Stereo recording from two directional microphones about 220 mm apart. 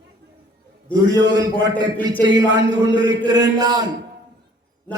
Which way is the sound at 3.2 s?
15° right (ahead or behind).